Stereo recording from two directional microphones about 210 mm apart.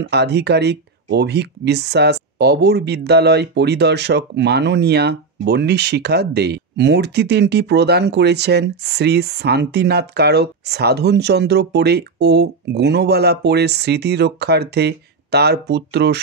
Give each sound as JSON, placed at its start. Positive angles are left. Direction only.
{"t": 0.0, "sound": "speech", "side_deg": -50}